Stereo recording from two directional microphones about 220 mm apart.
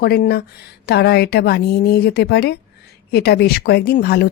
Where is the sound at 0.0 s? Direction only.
45° left (ahead or behind).